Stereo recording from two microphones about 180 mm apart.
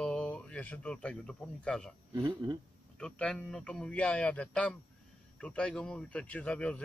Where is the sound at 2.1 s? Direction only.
25° right (ahead or behind).